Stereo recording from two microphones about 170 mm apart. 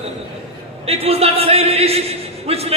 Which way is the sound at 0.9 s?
35° right (ahead or behind).